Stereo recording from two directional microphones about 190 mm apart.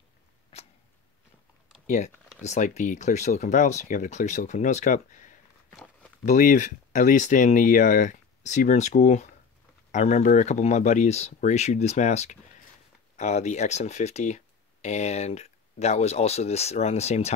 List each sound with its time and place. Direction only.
1.9 s speech: 40° left (ahead or behind)